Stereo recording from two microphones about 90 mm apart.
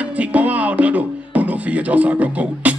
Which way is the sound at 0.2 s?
15° right (ahead or behind).